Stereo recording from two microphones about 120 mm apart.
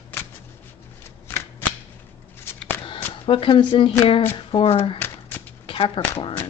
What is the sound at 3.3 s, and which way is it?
Speech, 45° left (ahead or behind).